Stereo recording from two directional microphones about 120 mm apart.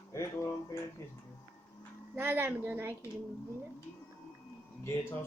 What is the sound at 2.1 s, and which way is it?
Speech, 15° right (ahead or behind).